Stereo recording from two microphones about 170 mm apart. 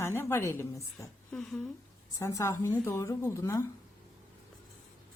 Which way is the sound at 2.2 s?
20° left (ahead or behind).